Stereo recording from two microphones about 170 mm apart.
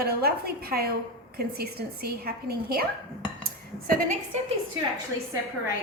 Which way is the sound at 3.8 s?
55° right (ahead or behind).